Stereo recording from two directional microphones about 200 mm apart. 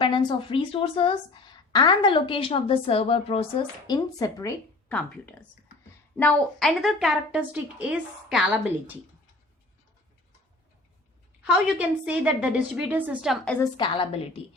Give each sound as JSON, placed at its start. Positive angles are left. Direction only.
{"t": 0.0, "sound": "a woman's voice", "side_deg": 25}
{"t": 3.8, "sound": "a woman's voice", "side_deg": 20}
{"t": 11.4, "sound": "a woman's voice", "side_deg": -5}
{"t": 13.7, "sound": "a woman's voice", "side_deg": 25}